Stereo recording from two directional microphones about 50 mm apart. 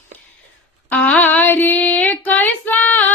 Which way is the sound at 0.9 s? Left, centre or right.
Left.